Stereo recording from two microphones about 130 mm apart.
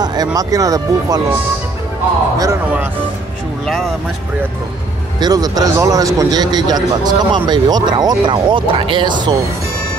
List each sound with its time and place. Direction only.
0.0 s speech: 30° right (ahead or behind)
3.6 s speech: centre (ahead or behind)
5.2 s a man's voice: 30° right (ahead or behind)